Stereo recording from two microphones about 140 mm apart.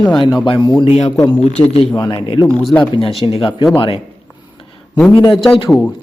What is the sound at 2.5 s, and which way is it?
Speech, 10° left (ahead or behind).